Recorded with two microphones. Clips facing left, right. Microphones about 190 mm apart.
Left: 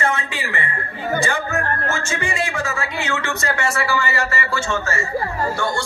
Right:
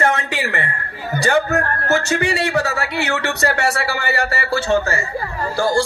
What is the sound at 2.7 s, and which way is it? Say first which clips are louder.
Speech: right 3 dB; 65° right (ahead or behind).